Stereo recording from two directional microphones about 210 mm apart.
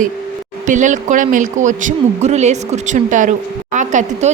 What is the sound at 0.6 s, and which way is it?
A woman's voice, 35° right (ahead or behind).